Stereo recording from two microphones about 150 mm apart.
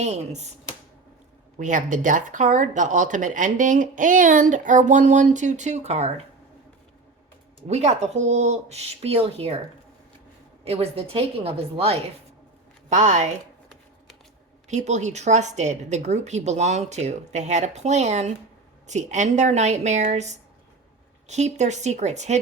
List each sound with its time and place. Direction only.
0.0 s a woman's voice: 50° right (ahead or behind)
1.5 s speech: 60° right (ahead or behind)
7.7 s a woman's voice: 50° right (ahead or behind)
10.6 s a woman's voice: 40° right (ahead or behind)
12.9 s a woman's voice: 55° right (ahead or behind)
14.7 s a woman's voice: 50° right (ahead or behind)